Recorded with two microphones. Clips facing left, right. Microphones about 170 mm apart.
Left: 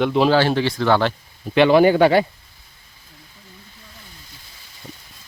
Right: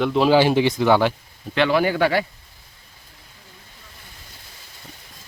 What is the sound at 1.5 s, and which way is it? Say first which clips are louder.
Speech: left 6 dB; 20° left (ahead or behind).